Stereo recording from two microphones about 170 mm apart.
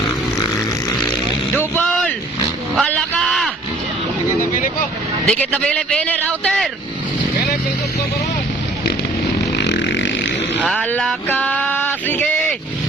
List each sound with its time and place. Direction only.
1.5 s vehicle: 10° left (ahead or behind)
2.7 s a sound: 5° left (ahead or behind)
4.4 s boat: 50° left (ahead or behind)
5.3 s a man's voice: 5° left (ahead or behind)
9.6 s vehicle: 90° left
10.7 s a sound: 10° left (ahead or behind)